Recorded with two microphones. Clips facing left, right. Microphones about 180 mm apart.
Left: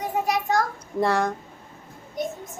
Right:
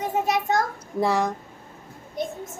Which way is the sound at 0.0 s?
25° right (ahead or behind).